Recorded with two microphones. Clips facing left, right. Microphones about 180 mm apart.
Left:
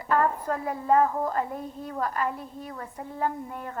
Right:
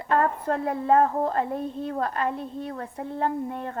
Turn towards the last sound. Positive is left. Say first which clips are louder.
# right 3 dB
turn(degrees=-25)  # may be behind; listen again after turning